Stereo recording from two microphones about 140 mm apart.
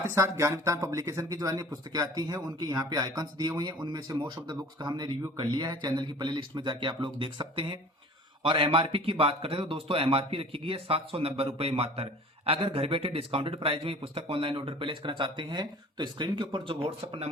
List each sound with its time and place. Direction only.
0.1 s speech: 20° right (ahead or behind); by 17.2 s 40° right (ahead or behind)